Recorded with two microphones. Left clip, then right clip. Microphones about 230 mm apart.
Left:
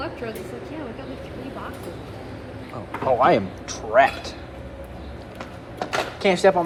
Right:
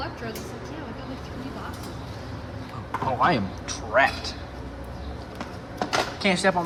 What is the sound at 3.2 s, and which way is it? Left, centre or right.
Speech, centre.